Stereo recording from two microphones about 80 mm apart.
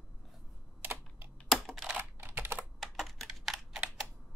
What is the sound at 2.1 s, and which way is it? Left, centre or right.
Typing, right.